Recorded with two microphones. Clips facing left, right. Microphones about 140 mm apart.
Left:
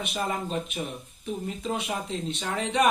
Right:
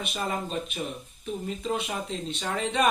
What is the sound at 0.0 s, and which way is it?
Speech, 15° left (ahead or behind).